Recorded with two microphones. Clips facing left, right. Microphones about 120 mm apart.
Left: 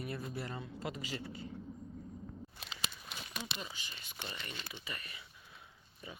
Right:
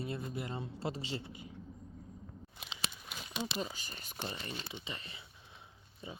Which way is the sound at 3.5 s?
40° right (ahead or behind).